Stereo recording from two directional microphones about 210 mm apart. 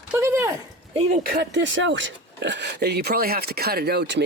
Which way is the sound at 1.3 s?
55° right (ahead or behind).